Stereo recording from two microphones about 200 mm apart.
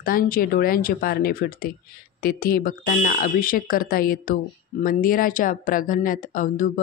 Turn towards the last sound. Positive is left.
turn(degrees=40)  # may be behind; listen again after turning